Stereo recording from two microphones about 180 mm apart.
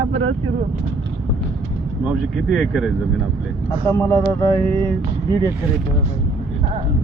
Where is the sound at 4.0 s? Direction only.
15° left (ahead or behind).